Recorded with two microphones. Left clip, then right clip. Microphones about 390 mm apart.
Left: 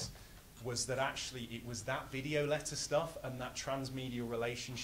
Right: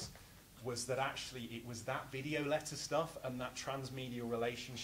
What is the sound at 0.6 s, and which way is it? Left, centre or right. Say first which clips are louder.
Speech: left 2 dB; left.